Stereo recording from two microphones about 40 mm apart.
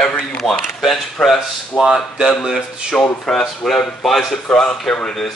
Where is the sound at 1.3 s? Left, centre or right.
Centre.